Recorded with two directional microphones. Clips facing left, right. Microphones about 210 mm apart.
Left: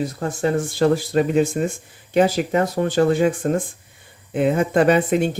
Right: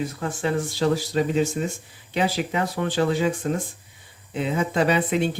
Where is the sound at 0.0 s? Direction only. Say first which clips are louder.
Left 4 dB; 40° left (ahead or behind).